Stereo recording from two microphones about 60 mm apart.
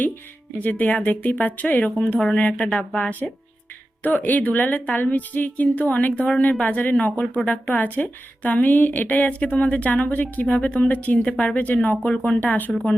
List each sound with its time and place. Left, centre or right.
0.6 s a woman's voice: left
10.4 s a woman's voice: centre
12.7 s speech: centre